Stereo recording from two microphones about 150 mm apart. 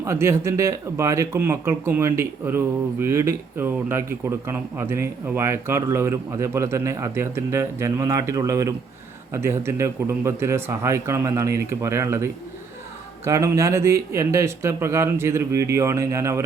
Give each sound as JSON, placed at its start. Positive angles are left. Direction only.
{"t": 0.0, "sound": "a man's voice", "side_deg": -20}